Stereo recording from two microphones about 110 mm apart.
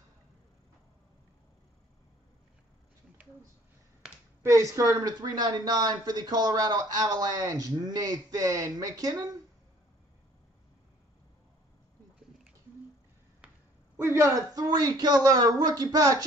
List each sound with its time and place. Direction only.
4.0 s a sound: 5° right (ahead or behind)
4.4 s speech: 30° right (ahead or behind)
13.9 s speech: 25° right (ahead or behind)